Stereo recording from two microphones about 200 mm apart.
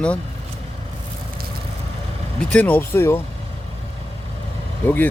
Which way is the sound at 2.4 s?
5° left (ahead or behind).